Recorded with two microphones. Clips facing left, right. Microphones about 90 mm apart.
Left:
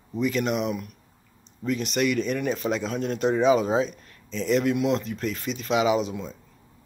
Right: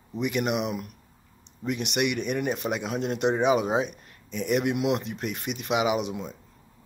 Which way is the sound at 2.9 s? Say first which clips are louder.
Even; 25° right (ahead or behind).